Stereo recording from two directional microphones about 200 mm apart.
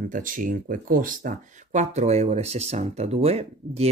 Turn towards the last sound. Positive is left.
turn(degrees=-30)  # may be behind; listen again after turning